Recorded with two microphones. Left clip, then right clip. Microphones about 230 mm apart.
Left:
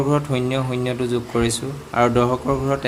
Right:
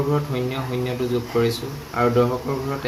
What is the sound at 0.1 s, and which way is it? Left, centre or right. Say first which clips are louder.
Speech: left 3 dB; left.